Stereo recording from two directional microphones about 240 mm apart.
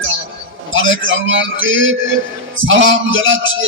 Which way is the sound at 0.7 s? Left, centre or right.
Right.